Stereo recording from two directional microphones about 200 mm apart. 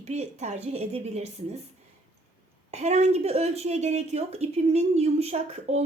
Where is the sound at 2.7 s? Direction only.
35° right (ahead or behind).